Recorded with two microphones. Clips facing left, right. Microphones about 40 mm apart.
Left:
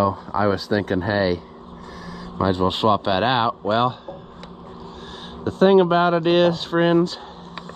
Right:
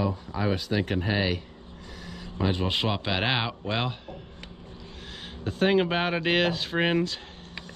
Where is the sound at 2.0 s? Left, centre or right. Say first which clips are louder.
Left 7 dB; left.